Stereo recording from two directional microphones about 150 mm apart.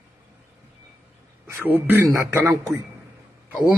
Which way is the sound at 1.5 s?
15° right (ahead or behind).